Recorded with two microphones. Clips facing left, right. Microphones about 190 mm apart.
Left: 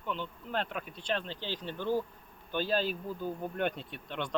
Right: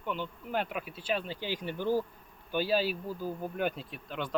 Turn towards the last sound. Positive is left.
turn(degrees=0)  # may be behind; listen again after turning